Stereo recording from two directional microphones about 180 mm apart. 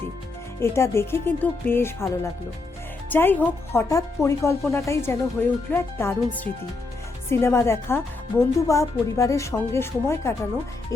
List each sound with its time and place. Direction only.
0.6 s a woman's voice: 15° left (ahead or behind)